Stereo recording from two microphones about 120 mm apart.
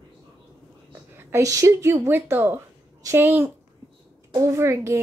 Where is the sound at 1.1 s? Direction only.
25° right (ahead or behind).